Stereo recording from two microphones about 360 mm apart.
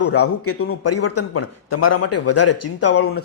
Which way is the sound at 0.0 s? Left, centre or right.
Left.